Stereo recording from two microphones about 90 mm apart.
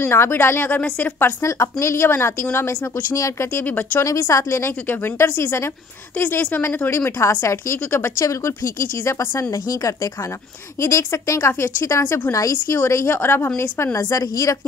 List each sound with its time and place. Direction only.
0.0 s a woman's voice: 25° left (ahead or behind)
1.4 s a woman's voice: 30° left (ahead or behind)
3.6 s a woman's voice: 20° left (ahead or behind)
4.0 s a woman's voice: 35° left (ahead or behind)
12.3 s a woman's voice: 35° left (ahead or behind)
13.9 s a woman's voice: 40° left (ahead or behind)